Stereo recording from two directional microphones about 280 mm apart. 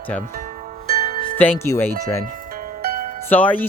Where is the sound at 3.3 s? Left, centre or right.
Centre.